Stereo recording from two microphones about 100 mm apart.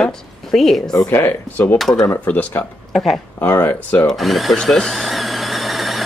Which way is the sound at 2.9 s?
Centre (ahead or behind).